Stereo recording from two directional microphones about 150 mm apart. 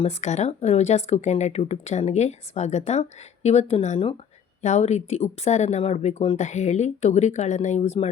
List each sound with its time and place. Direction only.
0.0 s speech: 50° left (ahead or behind)